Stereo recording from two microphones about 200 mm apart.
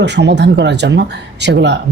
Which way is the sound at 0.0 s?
60° right (ahead or behind).